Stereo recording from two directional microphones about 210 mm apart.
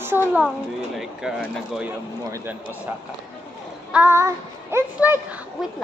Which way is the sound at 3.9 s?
10° right (ahead or behind).